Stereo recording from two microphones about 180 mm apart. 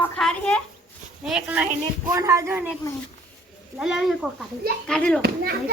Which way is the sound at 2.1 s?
15° right (ahead or behind).